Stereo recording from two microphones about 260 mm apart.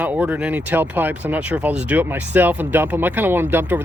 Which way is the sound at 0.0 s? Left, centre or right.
Centre.